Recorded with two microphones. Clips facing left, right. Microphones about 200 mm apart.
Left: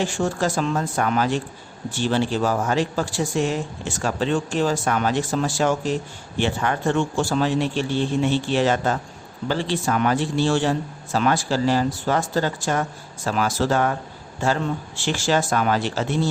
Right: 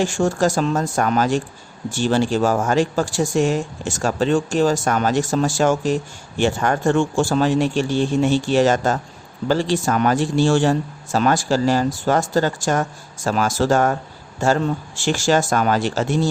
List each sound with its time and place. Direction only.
0.0 s speech: 45° right (ahead or behind)